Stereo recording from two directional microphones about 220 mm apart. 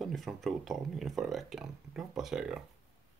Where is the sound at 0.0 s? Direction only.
Centre (ahead or behind).